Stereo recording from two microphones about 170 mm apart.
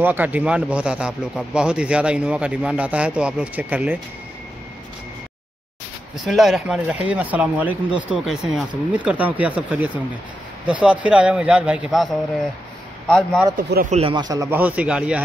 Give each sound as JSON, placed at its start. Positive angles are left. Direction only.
{"t": 0.0, "sound": "a man's voice", "side_deg": -10}
{"t": 6.2, "sound": "a man's voice", "side_deg": 0}
{"t": 13.8, "sound": "speech", "side_deg": -40}
{"t": 14.1, "sound": "a man's voice", "side_deg": -20}